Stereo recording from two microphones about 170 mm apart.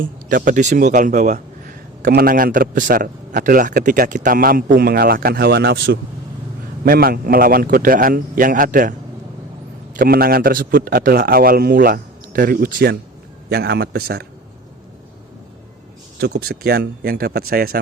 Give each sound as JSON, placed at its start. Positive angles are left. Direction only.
{"t": 0.0, "sound": "a man's voice", "side_deg": -55}
{"t": 2.0, "sound": "a man's voice", "side_deg": -60}
{"t": 10.0, "sound": "a man's voice", "side_deg": -60}
{"t": 16.2, "sound": "a man's voice", "side_deg": -70}